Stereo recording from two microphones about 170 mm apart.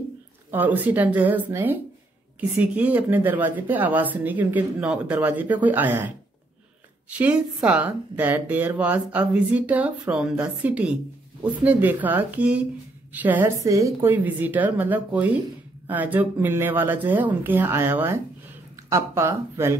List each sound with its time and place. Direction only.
0.5 s speech: 10° right (ahead or behind)